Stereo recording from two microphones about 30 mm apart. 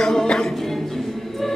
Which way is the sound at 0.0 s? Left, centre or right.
Centre.